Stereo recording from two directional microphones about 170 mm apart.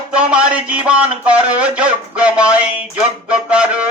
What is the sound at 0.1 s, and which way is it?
Speech, 5° right (ahead or behind).